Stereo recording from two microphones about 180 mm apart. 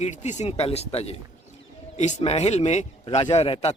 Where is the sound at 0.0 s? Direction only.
40° left (ahead or behind).